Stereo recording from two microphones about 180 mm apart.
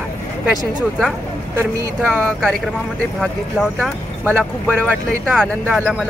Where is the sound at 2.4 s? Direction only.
Centre (ahead or behind).